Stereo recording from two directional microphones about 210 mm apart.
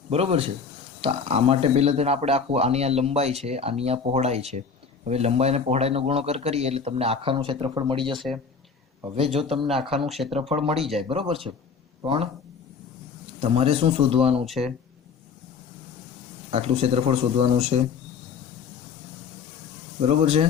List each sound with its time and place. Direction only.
0.1 s a man's voice: 30° right (ahead or behind)
9.4 s a man's voice: 25° right (ahead or behind)
10.0 s speech: centre (ahead or behind)
11.1 s a man's voice: 25° right (ahead or behind)
13.4 s a man's voice: 30° right (ahead or behind)
14.4 s speech: centre (ahead or behind)
16.5 s a man's voice: 30° right (ahead or behind)
20.0 s a man's voice: 30° right (ahead or behind)